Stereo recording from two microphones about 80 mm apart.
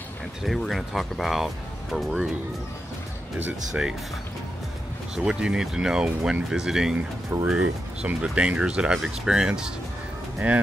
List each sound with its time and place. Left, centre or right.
0.4 s speech: centre
3.8 s speech: centre
5.1 s speech: centre